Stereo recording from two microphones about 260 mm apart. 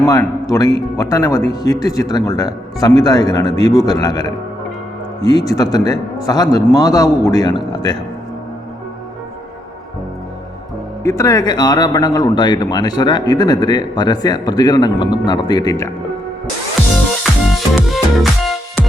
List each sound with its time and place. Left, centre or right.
0.0 s speech: centre
11.0 s speech: centre
17.7 s music: centre